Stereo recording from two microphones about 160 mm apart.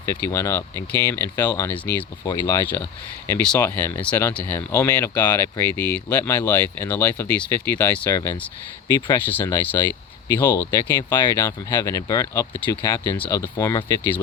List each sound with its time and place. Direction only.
0.0 s speech: 15° left (ahead or behind)